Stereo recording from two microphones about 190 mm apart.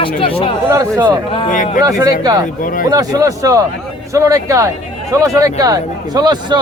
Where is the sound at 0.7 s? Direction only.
15° right (ahead or behind).